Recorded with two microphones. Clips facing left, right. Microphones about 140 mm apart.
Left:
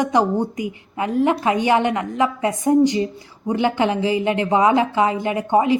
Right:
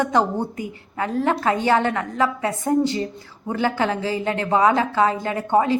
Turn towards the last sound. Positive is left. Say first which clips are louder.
# left 2 dB
turn(degrees=15)  # may be behind; listen again after turning